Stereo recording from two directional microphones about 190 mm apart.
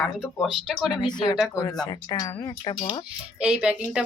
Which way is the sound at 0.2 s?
Centre (ahead or behind).